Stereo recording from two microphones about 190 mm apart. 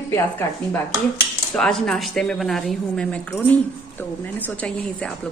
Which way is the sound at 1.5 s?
Centre (ahead or behind).